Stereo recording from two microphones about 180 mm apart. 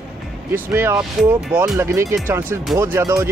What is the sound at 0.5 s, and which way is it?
Speech, 10° right (ahead or behind).